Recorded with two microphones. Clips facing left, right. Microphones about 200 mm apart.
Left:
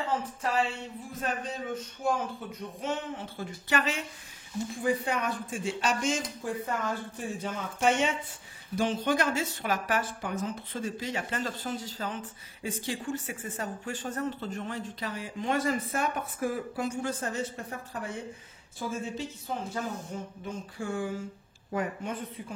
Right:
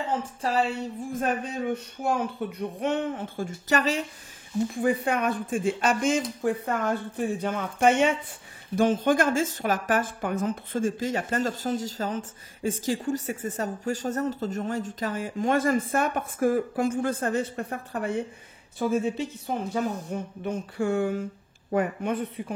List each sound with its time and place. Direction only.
0.0 s speech: 30° right (ahead or behind)
4.7 s speech: 55° right (ahead or behind)